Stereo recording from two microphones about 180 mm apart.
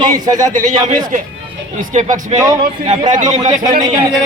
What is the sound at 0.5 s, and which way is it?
A man's voice, 45° right (ahead or behind).